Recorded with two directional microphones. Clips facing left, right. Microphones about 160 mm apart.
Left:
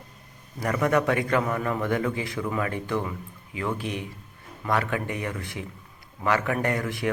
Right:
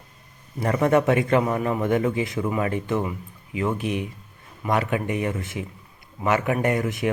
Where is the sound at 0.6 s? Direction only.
25° right (ahead or behind).